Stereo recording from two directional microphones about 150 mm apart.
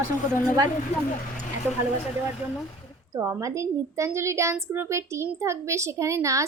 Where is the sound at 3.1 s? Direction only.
20° right (ahead or behind).